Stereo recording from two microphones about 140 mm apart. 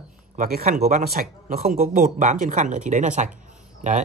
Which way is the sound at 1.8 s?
65° right (ahead or behind).